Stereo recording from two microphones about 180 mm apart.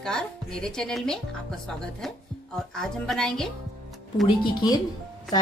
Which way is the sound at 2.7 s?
5° left (ahead or behind).